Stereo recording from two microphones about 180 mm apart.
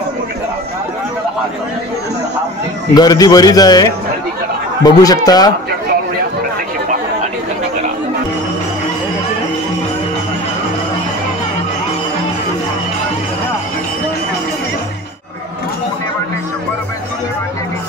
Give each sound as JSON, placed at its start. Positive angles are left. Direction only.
{"t": 2.9, "sound": "a man's voice", "side_deg": 20}
{"t": 4.8, "sound": "a man's voice", "side_deg": 20}